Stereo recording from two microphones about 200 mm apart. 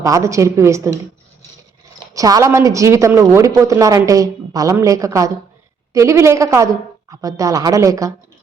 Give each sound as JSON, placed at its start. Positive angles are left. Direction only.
{"t": 0.0, "sound": "a woman's voice", "side_deg": -15}
{"t": 2.1, "sound": "a woman's voice", "side_deg": -15}